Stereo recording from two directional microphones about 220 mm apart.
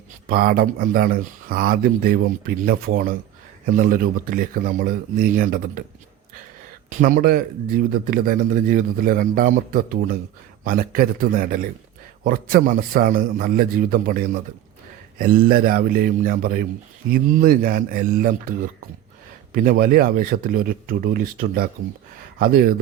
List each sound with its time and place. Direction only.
0.3 s speech: 40° right (ahead or behind)
7.0 s speech: 40° right (ahead or behind)
19.5 s speech: 40° right (ahead or behind)